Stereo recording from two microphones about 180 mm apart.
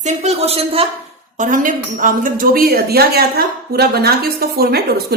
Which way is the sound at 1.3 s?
45° right (ahead or behind).